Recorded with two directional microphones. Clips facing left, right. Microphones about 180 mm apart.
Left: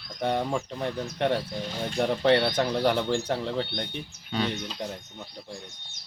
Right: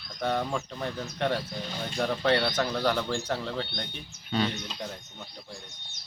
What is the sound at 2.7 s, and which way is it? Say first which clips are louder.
Speech: left 3 dB; 15° left (ahead or behind).